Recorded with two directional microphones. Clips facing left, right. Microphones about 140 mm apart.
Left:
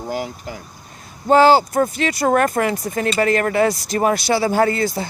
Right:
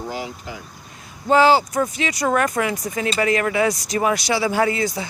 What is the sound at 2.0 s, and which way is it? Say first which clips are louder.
Speech: left 3 dB; 50° left (ahead or behind).